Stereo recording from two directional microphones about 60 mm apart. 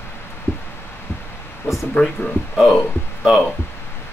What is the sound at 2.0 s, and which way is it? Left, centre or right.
Speech, left.